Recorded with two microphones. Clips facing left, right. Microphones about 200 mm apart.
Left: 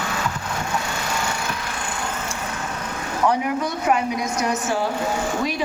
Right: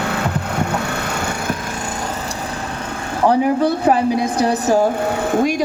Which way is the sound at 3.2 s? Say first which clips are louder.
Right 7 dB; 30° right (ahead or behind).